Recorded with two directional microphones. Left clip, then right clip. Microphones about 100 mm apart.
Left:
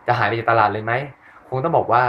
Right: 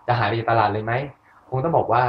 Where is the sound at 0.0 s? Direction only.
15° left (ahead or behind).